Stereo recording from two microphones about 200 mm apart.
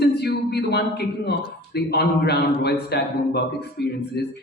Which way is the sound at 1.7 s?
55° left (ahead or behind).